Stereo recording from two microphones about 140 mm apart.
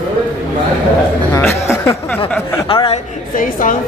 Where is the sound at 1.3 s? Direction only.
20° left (ahead or behind).